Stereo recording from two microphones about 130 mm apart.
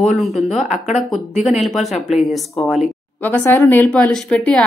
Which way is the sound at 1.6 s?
Centre (ahead or behind).